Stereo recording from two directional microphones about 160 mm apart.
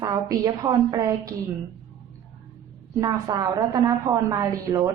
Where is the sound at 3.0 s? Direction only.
20° right (ahead or behind).